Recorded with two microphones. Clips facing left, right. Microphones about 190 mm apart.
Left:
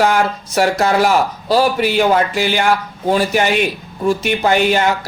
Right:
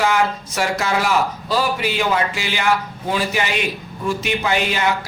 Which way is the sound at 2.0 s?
50° left (ahead or behind).